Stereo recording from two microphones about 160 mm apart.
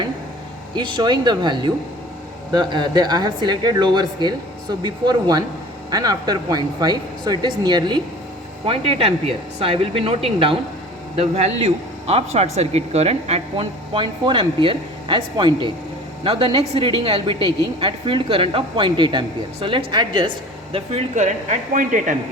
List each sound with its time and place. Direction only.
0.8 s speech: 25° right (ahead or behind)
20.7 s speech: 45° right (ahead or behind)